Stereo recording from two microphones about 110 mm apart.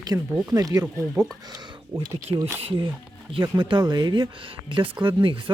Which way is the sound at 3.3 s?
45° right (ahead or behind).